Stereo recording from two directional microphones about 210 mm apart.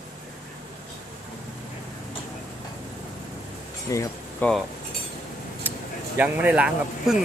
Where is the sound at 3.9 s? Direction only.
15° left (ahead or behind).